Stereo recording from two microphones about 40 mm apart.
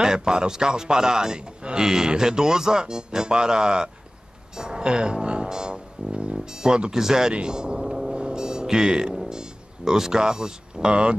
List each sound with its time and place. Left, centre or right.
0.0 s a man's voice: centre
8.3 s music: centre